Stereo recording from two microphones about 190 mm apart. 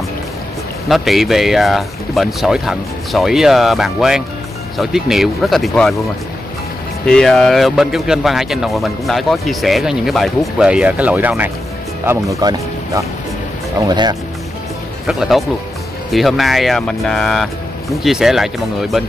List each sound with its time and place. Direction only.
0.8 s speech: centre (ahead or behind)
7.1 s speech: 5° left (ahead or behind); by 14.1 s 20° right (ahead or behind)
15.0 s speech: centre (ahead or behind)